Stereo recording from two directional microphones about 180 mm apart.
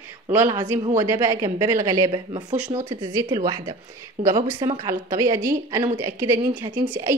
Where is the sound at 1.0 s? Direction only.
15° right (ahead or behind).